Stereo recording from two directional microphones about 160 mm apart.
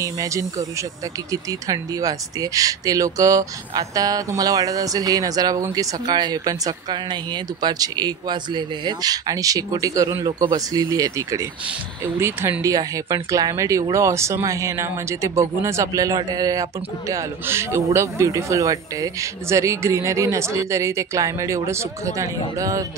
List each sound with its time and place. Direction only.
0.0 s a man's voice: 20° right (ahead or behind)